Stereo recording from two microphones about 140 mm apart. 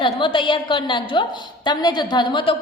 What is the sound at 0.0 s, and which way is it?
A woman's voice, 35° left (ahead or behind).